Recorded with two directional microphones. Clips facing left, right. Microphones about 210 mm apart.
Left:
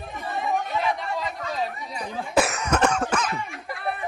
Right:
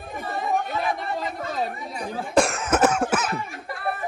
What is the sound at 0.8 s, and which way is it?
Chatter, 50° right (ahead or behind).